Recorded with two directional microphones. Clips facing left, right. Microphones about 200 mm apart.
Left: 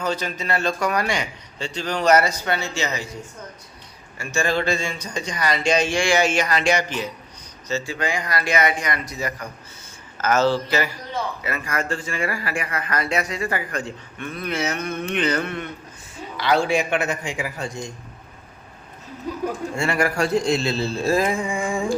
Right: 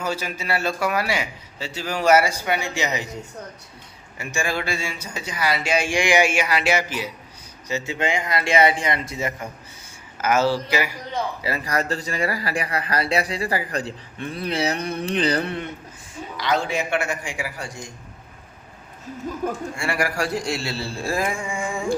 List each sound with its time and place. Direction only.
0.0 s a man's voice: 10° right (ahead or behind)
4.2 s a man's voice: 15° right (ahead or behind)
7.7 s speech: 20° right (ahead or behind)
10.2 s a man's voice: 10° right (ahead or behind)
11.4 s speech: 35° right (ahead or behind)
16.4 s a man's voice: 10° left (ahead or behind)
19.7 s a man's voice: 25° left (ahead or behind)
21.3 s a sound: 35° left (ahead or behind)